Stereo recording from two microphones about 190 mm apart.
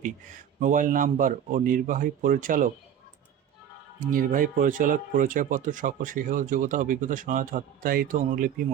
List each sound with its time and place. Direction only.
0.0 s speech: 40° right (ahead or behind)
4.0 s speech: 45° right (ahead or behind)